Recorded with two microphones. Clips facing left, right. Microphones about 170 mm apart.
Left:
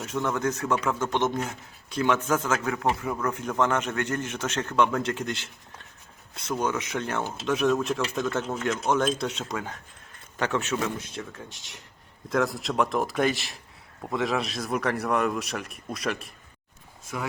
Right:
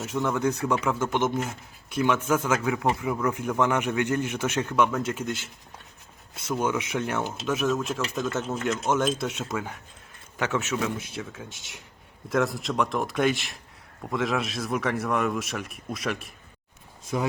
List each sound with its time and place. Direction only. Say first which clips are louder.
0.0 s speech: right 2 dB; 15° right (ahead or behind)
6.5 s speech: right 1 dB; 10° right (ahead or behind)
7.4 s a man's voice: left 3 dB; centre (ahead or behind)